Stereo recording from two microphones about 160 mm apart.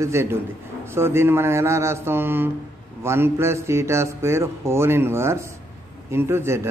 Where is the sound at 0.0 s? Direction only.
15° right (ahead or behind).